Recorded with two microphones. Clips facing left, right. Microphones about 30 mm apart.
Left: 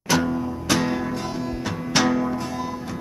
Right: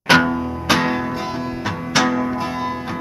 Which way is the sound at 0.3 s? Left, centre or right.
Right.